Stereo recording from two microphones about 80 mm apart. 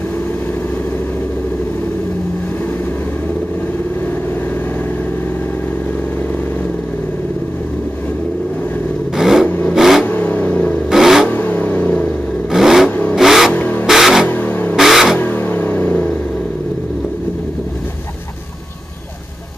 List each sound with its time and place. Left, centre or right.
9.1 s vehicle: centre
10.0 s vehicle: left
10.9 s vehicle: centre
11.2 s vehicle: left
12.5 s vehicle: centre
13.5 s vehicle: left
13.8 s vehicle: centre
14.3 s vehicle: left
14.8 s a sound: centre
15.1 s vehicle: left